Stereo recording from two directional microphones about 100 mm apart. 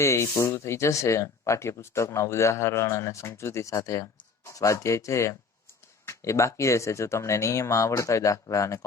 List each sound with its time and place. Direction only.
0.0 s speech: 30° left (ahead or behind)